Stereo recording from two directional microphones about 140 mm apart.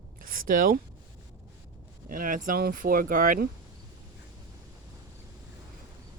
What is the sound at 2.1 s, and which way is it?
Speech, 75° right (ahead or behind).